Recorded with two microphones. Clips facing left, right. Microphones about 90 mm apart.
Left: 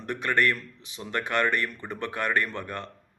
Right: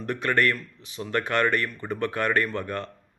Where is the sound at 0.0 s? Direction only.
20° left (ahead or behind).